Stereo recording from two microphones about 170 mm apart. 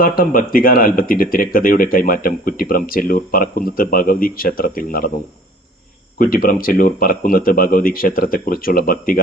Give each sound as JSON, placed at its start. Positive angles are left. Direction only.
{"t": 0.0, "sound": "speech", "side_deg": 55}
{"t": 6.1, "sound": "speech", "side_deg": 55}